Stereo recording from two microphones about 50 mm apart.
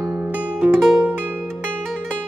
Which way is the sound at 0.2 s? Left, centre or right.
Right.